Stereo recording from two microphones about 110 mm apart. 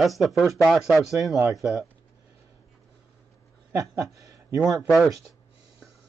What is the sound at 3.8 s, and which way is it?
Speech, centre (ahead or behind).